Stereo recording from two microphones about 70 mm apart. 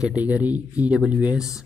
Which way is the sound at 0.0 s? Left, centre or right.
Centre.